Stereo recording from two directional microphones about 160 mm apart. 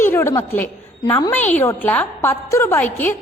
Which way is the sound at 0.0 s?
15° left (ahead or behind).